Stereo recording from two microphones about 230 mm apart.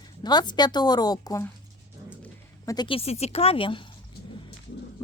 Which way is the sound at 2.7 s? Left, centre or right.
Left.